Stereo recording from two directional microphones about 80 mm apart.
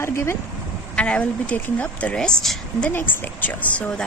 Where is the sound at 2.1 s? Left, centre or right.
Centre.